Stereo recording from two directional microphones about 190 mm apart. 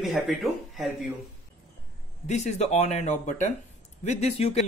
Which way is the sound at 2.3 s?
35° left (ahead or behind).